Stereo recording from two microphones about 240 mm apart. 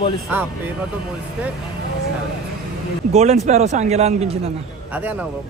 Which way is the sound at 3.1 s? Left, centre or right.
Right.